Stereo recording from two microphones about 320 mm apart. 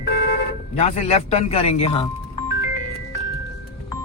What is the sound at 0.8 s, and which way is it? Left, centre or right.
Speech, centre.